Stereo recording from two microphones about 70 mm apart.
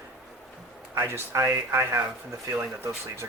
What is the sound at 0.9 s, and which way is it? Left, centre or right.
Speech, right.